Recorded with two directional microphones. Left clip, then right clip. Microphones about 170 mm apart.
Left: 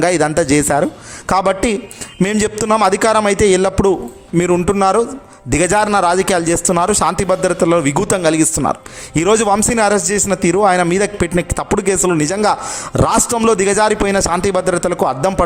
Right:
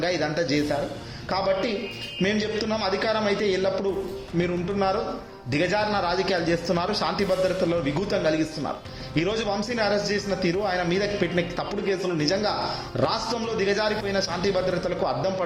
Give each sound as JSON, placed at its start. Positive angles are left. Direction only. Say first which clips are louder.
{"t": 0.0, "sound": "a man's voice", "louder": "left 11 dB", "side_deg": 50}